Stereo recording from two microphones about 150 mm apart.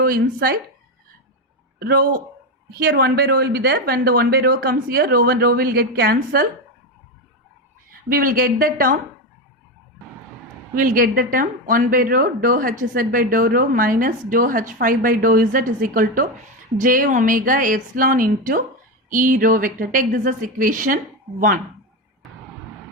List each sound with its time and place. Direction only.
0.0 s a woman's voice: 80° right
1.8 s a woman's voice: 75° right (ahead or behind)
2.6 s a woman's voice: 90° right
8.1 s a woman's voice: 70° right (ahead or behind)
10.8 s a woman's voice: 70° right (ahead or behind)